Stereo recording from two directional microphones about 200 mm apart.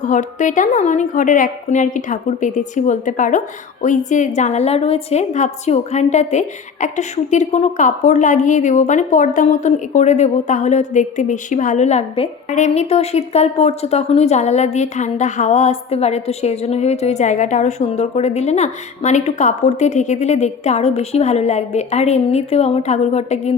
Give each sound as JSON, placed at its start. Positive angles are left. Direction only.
{"t": 0.0, "sound": "a woman's voice", "side_deg": 40}